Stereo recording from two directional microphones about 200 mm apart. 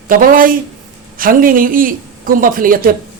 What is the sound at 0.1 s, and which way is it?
Speech, 45° right (ahead or behind).